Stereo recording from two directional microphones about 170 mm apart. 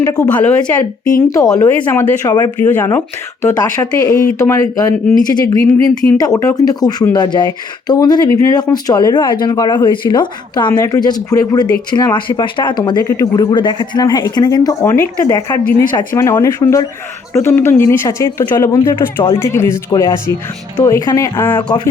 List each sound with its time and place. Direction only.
0.0 s speech: 20° left (ahead or behind)
0.3 s speech: 10° left (ahead or behind)
1.3 s speech: 20° left (ahead or behind)